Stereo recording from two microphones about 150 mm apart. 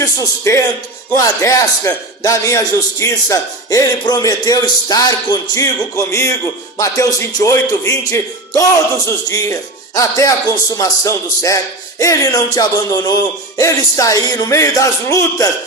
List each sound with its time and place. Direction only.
0.0 s a man's voice: 20° left (ahead or behind)